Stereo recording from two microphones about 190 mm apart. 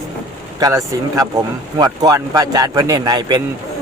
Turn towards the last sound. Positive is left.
turn(degrees=-20)  # may be behind; listen again after turning